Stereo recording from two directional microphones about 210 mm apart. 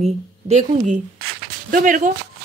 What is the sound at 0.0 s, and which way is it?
Speech, 30° right (ahead or behind).